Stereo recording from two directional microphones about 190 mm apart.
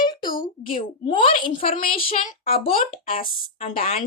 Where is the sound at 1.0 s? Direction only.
25° left (ahead or behind).